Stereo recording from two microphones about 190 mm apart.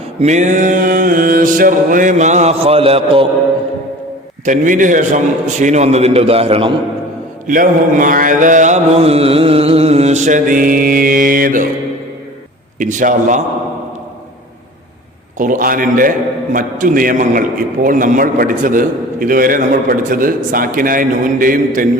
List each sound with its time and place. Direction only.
0.2 s mantra: 40° right (ahead or behind)
4.4 s mantra: 40° right (ahead or behind)
7.4 s mantra: 45° right (ahead or behind)
12.8 s mantra: 45° right (ahead or behind)
15.4 s mantra: 45° right (ahead or behind)